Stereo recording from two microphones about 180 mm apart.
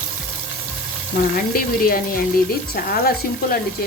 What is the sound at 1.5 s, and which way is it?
A woman's voice, 55° left (ahead or behind).